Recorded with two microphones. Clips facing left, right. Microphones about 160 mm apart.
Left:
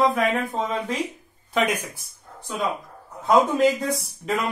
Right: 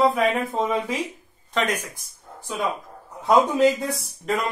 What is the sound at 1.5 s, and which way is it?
Speech, 10° left (ahead or behind).